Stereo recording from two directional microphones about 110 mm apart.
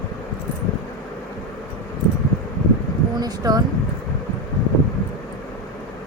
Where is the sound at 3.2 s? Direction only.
35° right (ahead or behind).